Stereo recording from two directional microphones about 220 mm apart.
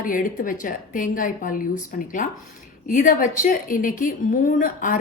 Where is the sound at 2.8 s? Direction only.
35° left (ahead or behind).